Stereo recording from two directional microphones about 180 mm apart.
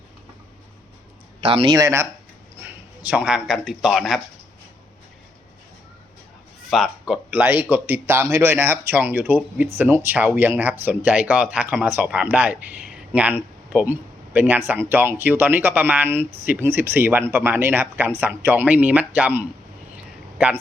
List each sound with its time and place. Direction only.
1.4 s a man's voice: 30° right (ahead or behind); by 4.2 s centre (ahead or behind)
6.7 s speech: centre (ahead or behind)